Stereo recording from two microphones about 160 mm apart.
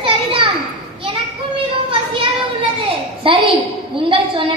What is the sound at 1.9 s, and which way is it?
Speech, 35° right (ahead or behind).